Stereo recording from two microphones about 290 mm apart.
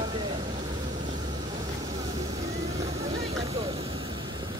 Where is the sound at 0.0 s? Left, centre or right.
Centre.